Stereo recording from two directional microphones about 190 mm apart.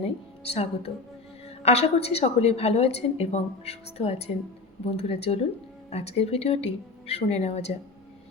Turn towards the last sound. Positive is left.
turn(degrees=35)  # may be behind; listen again after turning